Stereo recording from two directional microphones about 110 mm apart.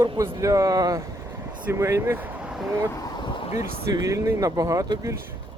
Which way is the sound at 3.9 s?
30° right (ahead or behind).